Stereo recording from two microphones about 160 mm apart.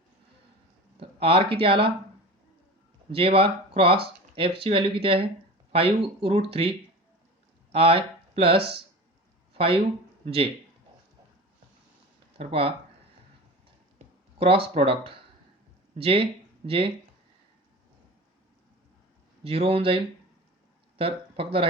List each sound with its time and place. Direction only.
0.9 s speech: 35° right (ahead or behind)
3.1 s speech: 35° right (ahead or behind)
12.4 s speech: 35° right (ahead or behind)
14.3 s speech: 35° right (ahead or behind)
19.5 s speech: 35° right (ahead or behind)
21.0 s speech: 35° right (ahead or behind)